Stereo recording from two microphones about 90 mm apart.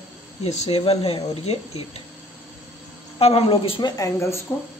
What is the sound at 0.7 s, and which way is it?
Speech, 90° left.